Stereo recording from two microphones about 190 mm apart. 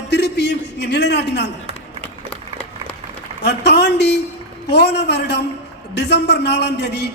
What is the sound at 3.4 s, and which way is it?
A man's voice, 60° left (ahead or behind).